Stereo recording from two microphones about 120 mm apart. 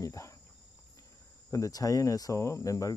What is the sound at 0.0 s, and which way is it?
Insect, 25° left (ahead or behind).